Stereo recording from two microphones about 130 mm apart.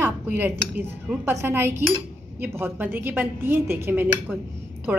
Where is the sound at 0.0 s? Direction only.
15° right (ahead or behind).